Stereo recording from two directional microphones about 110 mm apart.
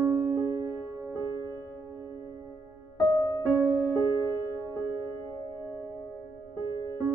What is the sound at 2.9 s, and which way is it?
Music, 35° left (ahead or behind).